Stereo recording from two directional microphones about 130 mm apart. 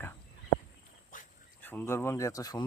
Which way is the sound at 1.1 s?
90° left.